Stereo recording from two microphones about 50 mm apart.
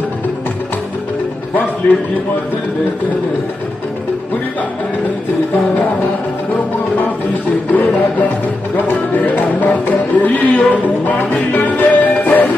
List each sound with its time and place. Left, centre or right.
7.7 s music: left